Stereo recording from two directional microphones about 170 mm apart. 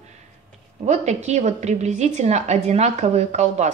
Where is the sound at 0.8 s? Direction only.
40° right (ahead or behind).